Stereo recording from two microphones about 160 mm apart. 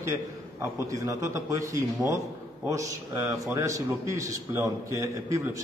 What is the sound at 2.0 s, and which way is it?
Speech, centre (ahead or behind).